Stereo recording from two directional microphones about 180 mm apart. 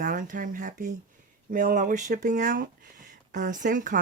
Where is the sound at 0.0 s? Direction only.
45° right (ahead or behind).